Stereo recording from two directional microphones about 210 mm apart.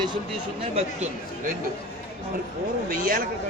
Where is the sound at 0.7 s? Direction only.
35° right (ahead or behind).